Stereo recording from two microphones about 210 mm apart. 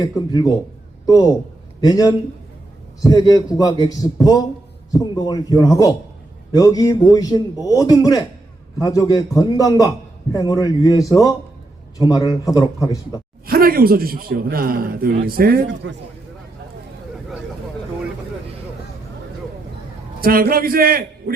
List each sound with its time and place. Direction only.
0.3 s a man's voice: 20° left (ahead or behind)
13.5 s a man's voice: 45° right (ahead or behind)
20.2 s a man's voice: 45° right (ahead or behind)